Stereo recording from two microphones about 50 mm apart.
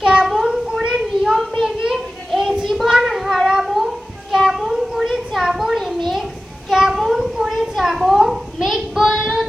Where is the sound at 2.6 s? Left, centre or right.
Centre.